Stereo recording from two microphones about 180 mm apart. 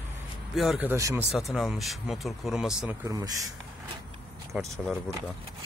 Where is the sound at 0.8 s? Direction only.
15° right (ahead or behind).